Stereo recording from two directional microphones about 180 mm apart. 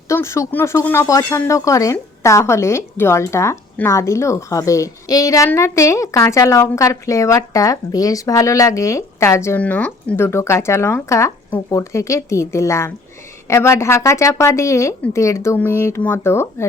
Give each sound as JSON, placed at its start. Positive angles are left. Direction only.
{"t": 0.1, "sound": "speech", "side_deg": 15}